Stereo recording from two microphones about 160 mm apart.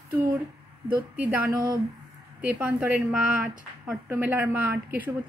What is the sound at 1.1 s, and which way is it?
Speech, 10° right (ahead or behind).